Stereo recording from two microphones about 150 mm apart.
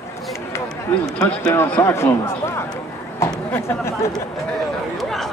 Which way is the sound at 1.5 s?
15° left (ahead or behind).